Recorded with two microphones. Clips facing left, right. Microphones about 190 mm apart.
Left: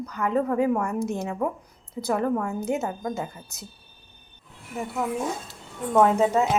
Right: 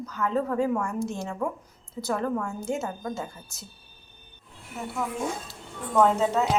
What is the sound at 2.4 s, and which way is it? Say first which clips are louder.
Speech: left 4 dB; 60° left (ahead or behind).